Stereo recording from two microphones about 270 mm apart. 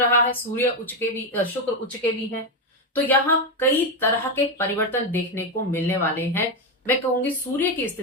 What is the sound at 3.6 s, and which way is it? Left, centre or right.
Speech, centre.